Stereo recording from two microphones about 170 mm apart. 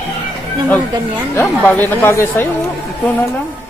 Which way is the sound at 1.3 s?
10° left (ahead or behind).